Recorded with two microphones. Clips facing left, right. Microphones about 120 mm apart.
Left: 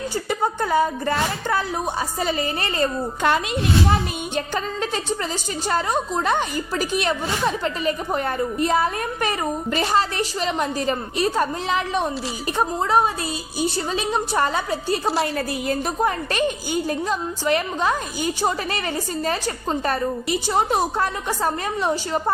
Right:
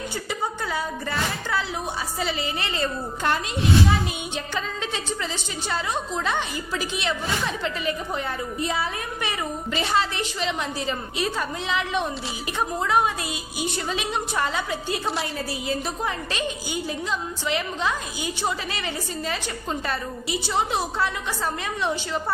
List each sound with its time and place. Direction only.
0.3 s a woman's voice: 50° left (ahead or behind)
3.2 s a child's voice: 90° left
4.4 s a woman's voice: 45° left (ahead or behind)
15.4 s a woman's voice: 50° left (ahead or behind)
19.8 s a woman's voice: 45° left (ahead or behind)